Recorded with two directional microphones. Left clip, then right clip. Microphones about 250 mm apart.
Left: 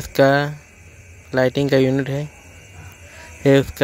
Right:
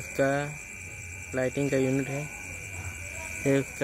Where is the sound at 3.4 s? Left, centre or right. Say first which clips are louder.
Left 12 dB; left.